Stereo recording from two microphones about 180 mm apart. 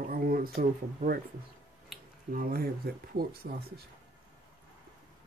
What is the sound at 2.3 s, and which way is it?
Speech, 55° right (ahead or behind).